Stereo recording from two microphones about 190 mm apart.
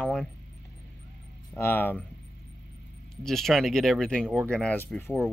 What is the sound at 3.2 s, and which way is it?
Speech, centre (ahead or behind).